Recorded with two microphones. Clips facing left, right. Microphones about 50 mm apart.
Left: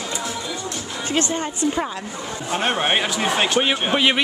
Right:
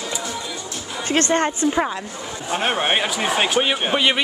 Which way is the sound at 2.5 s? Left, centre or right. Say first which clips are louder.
Even; centre.